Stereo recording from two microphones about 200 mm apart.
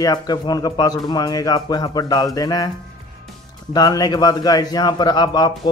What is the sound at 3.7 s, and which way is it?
Speech, 20° left (ahead or behind).